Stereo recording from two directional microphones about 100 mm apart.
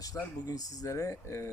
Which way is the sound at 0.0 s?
35° left (ahead or behind).